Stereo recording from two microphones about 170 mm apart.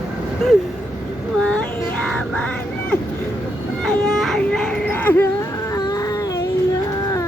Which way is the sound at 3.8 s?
Centre (ahead or behind).